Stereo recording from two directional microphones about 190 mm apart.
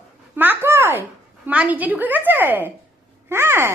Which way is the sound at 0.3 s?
10° right (ahead or behind).